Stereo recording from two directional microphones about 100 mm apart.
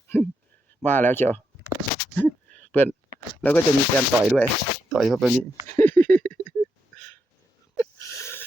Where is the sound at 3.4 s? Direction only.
20° left (ahead or behind).